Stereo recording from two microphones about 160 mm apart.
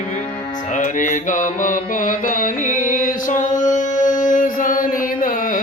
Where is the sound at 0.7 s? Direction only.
55° left (ahead or behind).